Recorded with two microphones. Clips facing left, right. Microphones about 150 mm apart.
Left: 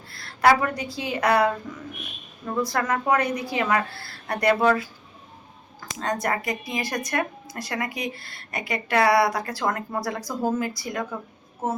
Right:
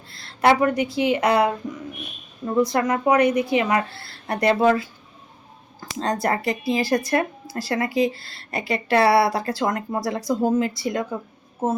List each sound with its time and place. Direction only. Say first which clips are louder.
0.1 s a woman's voice: right 1 dB; 25° right (ahead or behind)
2.6 s speech: right 5 dB; 20° right (ahead or behind)